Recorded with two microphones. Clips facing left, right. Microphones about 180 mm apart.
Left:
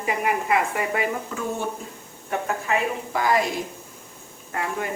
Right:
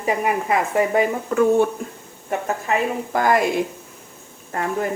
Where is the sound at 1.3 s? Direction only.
60° right (ahead or behind).